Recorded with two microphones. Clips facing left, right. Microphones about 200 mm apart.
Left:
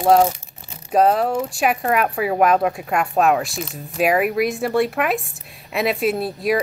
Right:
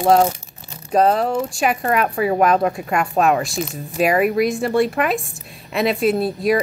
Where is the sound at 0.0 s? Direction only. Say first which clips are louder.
Even; centre (ahead or behind).